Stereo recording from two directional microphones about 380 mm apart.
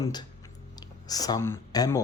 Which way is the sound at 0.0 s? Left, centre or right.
Centre.